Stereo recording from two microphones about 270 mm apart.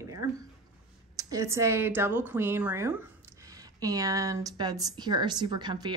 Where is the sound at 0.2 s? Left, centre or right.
Centre.